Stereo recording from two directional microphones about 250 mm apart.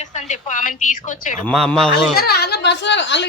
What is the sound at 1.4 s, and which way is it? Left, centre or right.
Speech, centre.